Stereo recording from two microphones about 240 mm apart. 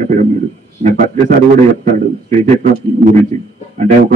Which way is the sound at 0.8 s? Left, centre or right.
Right.